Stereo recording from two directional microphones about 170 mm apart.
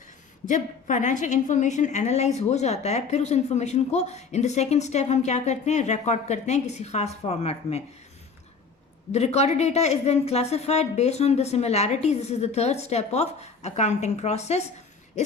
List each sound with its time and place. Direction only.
0.4 s a woman's voice: 50° left (ahead or behind)
9.1 s a woman's voice: 40° left (ahead or behind)